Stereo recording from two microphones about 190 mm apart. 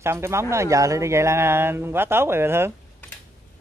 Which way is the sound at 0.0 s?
15° right (ahead or behind).